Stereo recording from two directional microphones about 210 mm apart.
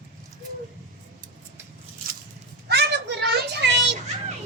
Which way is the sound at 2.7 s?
55° right (ahead or behind).